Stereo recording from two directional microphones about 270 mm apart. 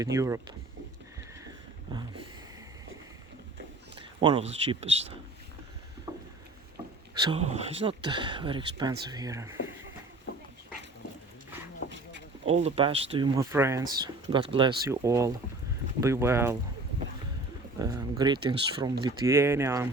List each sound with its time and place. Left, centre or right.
0.0 s speech: centre
4.2 s speech: centre
6.1 s rowboat: centre
7.1 s speech: centre
11.9 s a sound: right
12.5 s speech: right
17.7 s speech: centre